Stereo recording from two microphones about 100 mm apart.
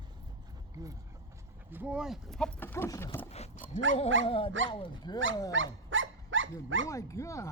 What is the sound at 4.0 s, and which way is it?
Speech, 65° left (ahead or behind).